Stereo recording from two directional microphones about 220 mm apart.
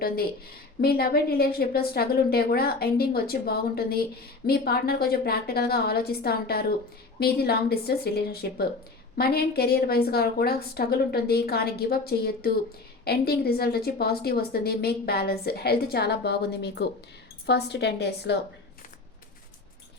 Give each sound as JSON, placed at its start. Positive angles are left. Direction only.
{"t": 0.8, "sound": "a woman's voice", "side_deg": 45}